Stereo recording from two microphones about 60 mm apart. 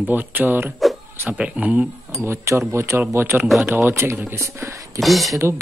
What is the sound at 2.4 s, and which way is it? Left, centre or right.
Speech, right.